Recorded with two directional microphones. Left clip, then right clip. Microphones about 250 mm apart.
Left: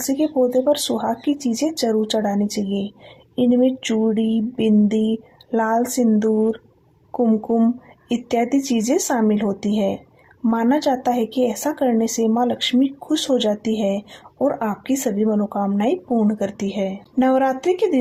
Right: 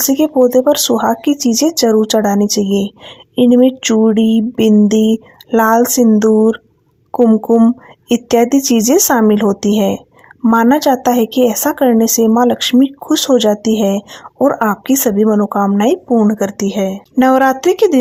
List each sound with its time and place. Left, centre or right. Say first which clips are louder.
0.0 s speech: right 8 dB; right